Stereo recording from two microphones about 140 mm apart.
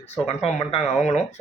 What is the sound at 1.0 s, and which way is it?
Speech, 55° left (ahead or behind).